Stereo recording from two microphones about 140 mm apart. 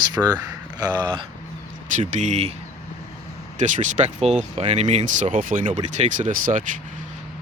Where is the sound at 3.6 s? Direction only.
60° right (ahead or behind); by 5.7 s 75° right (ahead or behind).